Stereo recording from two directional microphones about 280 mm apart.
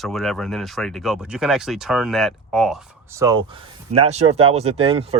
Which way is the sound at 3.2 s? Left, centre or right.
Centre.